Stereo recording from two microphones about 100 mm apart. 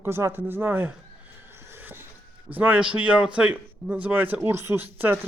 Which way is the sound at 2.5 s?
15° right (ahead or behind).